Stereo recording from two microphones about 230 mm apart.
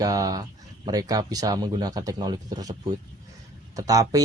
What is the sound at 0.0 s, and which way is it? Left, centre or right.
Speech, centre.